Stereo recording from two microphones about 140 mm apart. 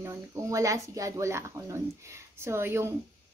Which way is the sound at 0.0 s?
20° right (ahead or behind).